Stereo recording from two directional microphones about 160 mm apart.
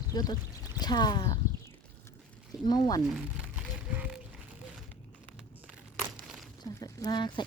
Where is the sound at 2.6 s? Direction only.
25° left (ahead or behind).